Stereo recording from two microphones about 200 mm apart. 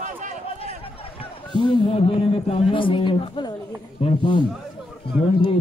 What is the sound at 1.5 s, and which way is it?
A man's voice, 25° left (ahead or behind).